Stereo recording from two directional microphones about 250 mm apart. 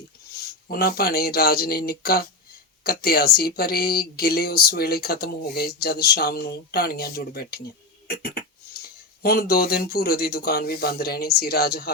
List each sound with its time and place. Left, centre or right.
0.7 s speech: left
8.0 s a sound: left
9.2 s speech: left